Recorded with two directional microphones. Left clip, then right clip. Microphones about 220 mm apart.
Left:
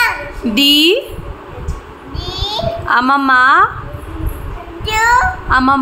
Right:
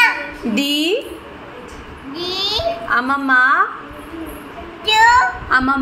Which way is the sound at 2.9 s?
25° left (ahead or behind).